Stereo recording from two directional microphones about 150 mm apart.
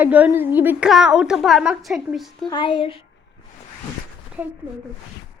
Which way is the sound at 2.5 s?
35° left (ahead or behind).